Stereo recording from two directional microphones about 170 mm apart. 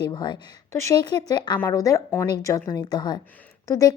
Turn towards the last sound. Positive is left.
turn(degrees=20)  # may be behind; listen again after turning